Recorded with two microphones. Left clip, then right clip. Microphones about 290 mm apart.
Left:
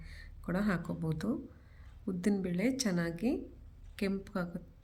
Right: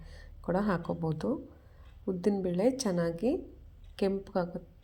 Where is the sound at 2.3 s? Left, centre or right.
Centre.